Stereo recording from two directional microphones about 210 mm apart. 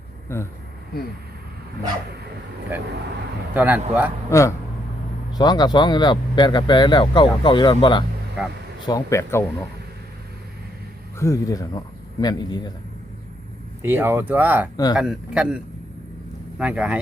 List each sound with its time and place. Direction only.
0.3 s speech: 10° left (ahead or behind)
3.5 s speech: 10° right (ahead or behind)
4.3 s speech: 15° left (ahead or behind)
8.4 s a man's voice: 5° right (ahead or behind)
8.9 s speech: 15° left (ahead or behind)
11.2 s speech: 15° left (ahead or behind)
13.8 s a man's voice: 10° right (ahead or behind)